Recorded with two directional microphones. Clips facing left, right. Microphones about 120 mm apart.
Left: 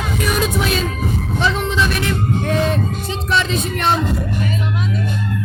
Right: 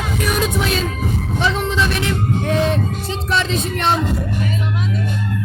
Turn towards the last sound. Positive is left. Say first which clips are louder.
# even
turn(degrees=-30)  # may be behind; listen again after turning